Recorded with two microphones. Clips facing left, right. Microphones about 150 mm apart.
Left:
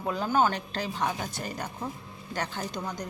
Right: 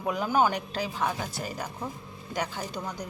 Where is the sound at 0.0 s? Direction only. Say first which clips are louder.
Right 1 dB; 10° right (ahead or behind).